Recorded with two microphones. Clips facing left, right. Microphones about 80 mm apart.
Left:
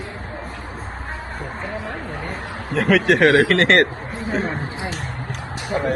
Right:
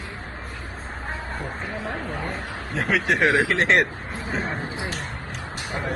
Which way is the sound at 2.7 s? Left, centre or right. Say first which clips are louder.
Left 6 dB; left.